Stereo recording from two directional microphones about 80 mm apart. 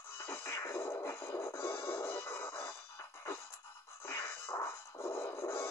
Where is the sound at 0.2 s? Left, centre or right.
Left.